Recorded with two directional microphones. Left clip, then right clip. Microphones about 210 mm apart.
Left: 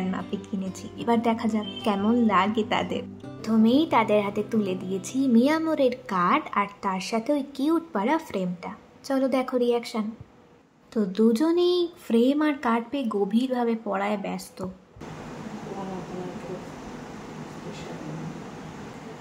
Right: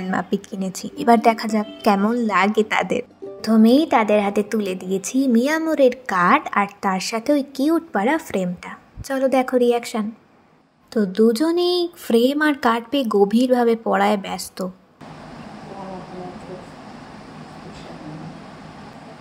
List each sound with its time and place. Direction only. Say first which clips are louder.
0.1 s a woman's voice: right 9 dB; 35° right (ahead or behind)